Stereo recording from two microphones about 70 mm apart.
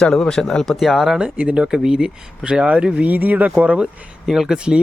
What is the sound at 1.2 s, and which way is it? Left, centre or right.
Speech, centre.